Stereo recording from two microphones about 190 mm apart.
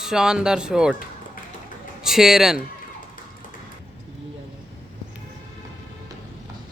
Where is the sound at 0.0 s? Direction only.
5° right (ahead or behind).